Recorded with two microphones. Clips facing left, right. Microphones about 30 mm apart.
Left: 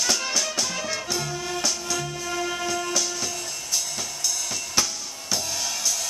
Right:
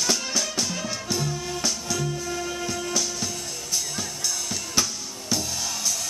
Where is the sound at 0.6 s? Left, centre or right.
Centre.